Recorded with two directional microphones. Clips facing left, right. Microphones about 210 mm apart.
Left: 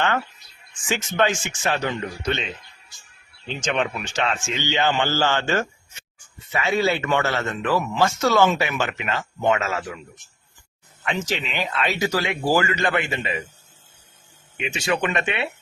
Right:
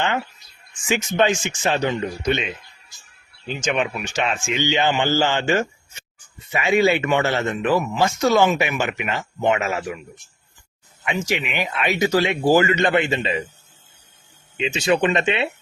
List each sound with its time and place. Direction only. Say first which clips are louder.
0.9 s speech: right 3 dB; 20° right (ahead or behind)
11.0 s speech: right 2 dB; 10° right (ahead or behind)
14.5 s speech: right 5 dB; 25° right (ahead or behind)